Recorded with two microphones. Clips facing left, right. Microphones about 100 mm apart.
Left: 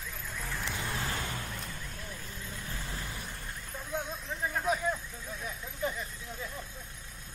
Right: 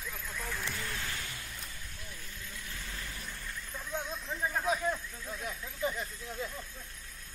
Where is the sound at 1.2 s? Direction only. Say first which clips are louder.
Left 6 dB; 45° left (ahead or behind).